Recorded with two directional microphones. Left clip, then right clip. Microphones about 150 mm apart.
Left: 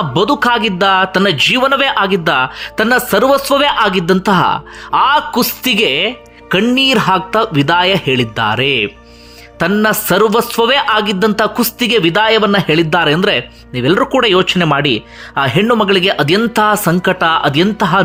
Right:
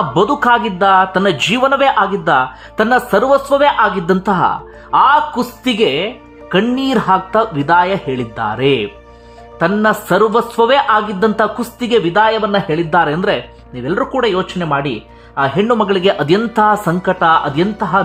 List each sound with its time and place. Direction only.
0.1 s a man's voice: 10° left (ahead or behind)
3.5 s speech: 30° left (ahead or behind)
4.0 s a man's voice: 10° left (ahead or behind); by 12.8 s 25° left (ahead or behind)
12.9 s a man's voice: 10° left (ahead or behind)
13.8 s a man's voice: 25° left (ahead or behind)